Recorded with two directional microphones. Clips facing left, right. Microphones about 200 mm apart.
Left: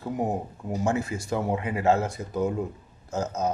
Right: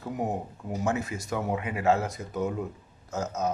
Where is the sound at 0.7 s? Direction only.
30° left (ahead or behind).